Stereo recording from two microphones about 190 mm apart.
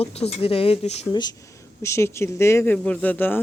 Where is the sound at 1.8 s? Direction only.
15° left (ahead or behind).